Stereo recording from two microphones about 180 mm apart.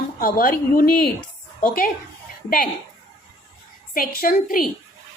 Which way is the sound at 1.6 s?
50° left (ahead or behind).